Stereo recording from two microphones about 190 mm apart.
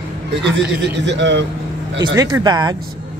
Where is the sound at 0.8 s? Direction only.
65° right (ahead or behind).